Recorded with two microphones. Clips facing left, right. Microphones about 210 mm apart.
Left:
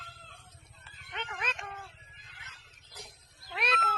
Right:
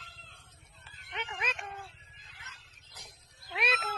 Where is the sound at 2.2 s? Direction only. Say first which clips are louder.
Even; 60° left (ahead or behind).